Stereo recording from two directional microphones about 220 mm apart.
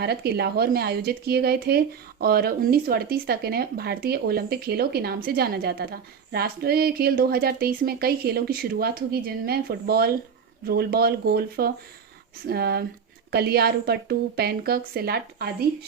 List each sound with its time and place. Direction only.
0.0 s speech: 45° right (ahead or behind)